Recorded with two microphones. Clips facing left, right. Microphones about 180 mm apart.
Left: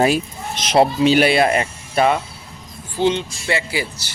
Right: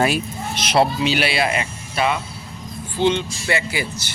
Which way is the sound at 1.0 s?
45° left (ahead or behind).